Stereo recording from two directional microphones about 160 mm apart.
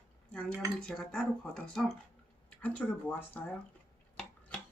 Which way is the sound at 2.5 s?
10° left (ahead or behind).